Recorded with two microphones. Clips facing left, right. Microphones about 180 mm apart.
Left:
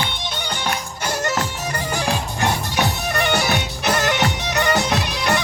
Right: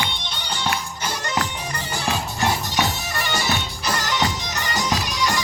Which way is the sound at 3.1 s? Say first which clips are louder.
Left 6 dB; 60° left (ahead or behind).